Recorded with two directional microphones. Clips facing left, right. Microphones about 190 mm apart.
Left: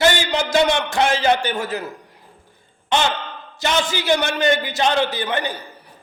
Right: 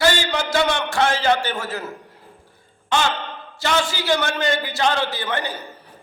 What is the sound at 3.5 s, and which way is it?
A man's voice, 20° left (ahead or behind).